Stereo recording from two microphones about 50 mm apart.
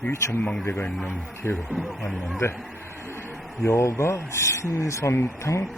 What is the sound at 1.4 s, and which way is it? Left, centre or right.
A man's voice, left.